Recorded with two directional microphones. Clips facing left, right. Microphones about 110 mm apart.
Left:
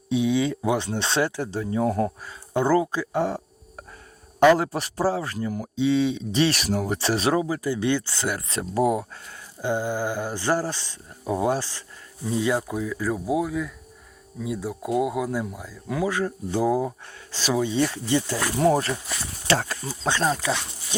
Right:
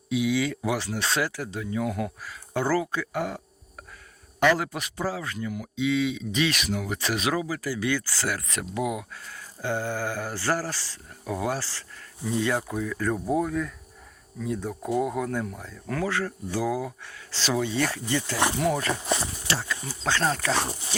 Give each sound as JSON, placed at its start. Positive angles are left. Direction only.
{"t": 0.1, "sound": "speech", "side_deg": 25}
{"t": 2.5, "sound": "speech", "side_deg": 20}
{"t": 8.8, "sound": "speech", "side_deg": 40}
{"t": 9.6, "sound": "speech", "side_deg": 20}
{"t": 17.3, "sound": "speech", "side_deg": 15}
{"t": 18.5, "sound": "speech", "side_deg": 35}
{"t": 18.9, "sound": "speech", "side_deg": -35}
{"t": 19.5, "sound": "speech", "side_deg": 40}
{"t": 20.2, "sound": "speech", "side_deg": 15}